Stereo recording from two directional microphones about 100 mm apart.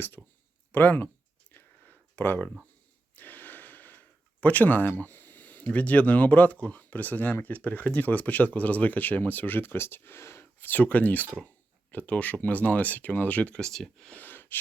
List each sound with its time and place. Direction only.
0.2 s speech: centre (ahead or behind)
0.7 s speech: 20° left (ahead or behind)
1.5 s a sound: 15° left (ahead or behind)
3.2 s gasp: 15° left (ahead or behind)
7.4 s speech: 15° left (ahead or behind)